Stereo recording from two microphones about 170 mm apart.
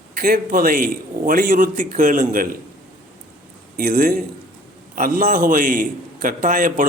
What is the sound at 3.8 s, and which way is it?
A man's voice, 55° right (ahead or behind).